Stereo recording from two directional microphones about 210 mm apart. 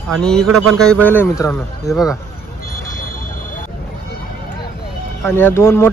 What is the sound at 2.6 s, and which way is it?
Vehicle, 45° left (ahead or behind).